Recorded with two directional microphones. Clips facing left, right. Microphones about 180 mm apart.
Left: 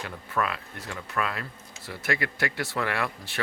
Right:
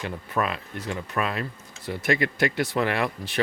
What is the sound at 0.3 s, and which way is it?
Speech, 20° right (ahead or behind).